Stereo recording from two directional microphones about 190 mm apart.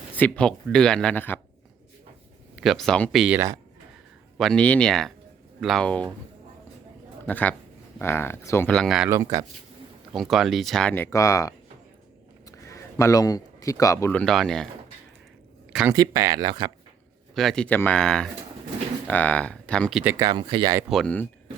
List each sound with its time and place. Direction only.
0.2 s speech: 5° left (ahead or behind)
2.6 s speech: centre (ahead or behind)
7.3 s speech: 10° left (ahead or behind)
8.7 s speech: centre (ahead or behind)
9.0 s speech: 15° right (ahead or behind)
10.1 s speech: centre (ahead or behind)
15.7 s speech: 5° right (ahead or behind)
16.0 s speech: 20° right (ahead or behind)
17.3 s speech: centre (ahead or behind)
20.1 s speech: 20° right (ahead or behind)
20.9 s speech: 5° left (ahead or behind)